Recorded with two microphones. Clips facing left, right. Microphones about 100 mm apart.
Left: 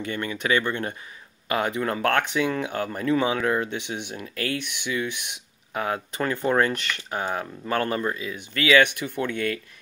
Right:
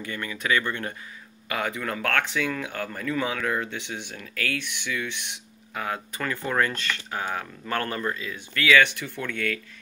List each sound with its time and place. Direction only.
0.0 s speech: 25° left (ahead or behind)